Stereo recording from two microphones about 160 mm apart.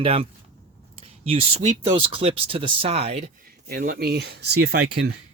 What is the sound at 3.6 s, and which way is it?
Speech, 65° right (ahead or behind).